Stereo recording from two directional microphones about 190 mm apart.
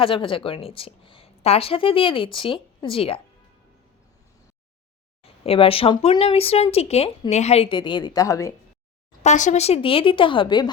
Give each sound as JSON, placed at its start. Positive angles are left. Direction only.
{"t": 0.0, "sound": "a woman's voice", "side_deg": 30}
{"t": 5.4, "sound": "a woman's voice", "side_deg": 30}
{"t": 9.2, "sound": "a woman's voice", "side_deg": 40}